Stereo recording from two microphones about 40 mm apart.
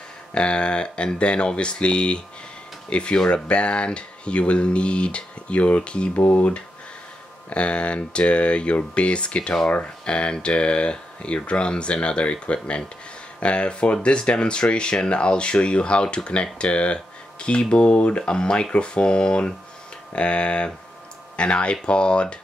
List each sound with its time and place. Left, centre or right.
0.3 s speech: left
6.1 s speech: left
7.4 s speech: left